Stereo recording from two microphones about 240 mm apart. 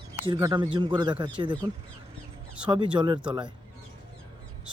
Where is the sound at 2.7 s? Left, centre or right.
Centre.